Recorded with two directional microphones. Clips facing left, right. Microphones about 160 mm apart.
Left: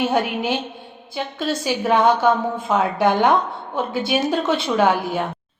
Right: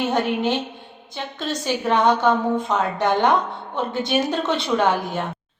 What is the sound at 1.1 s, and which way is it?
A woman's voice, 5° left (ahead or behind).